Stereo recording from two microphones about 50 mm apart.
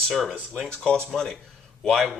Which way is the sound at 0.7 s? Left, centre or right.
Centre.